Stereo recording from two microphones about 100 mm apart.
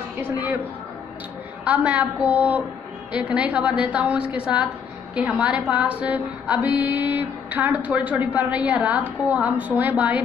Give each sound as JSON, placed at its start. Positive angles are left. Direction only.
{"t": 0.2, "sound": "speech", "side_deg": -15}
{"t": 1.7, "sound": "a woman's voice", "side_deg": -15}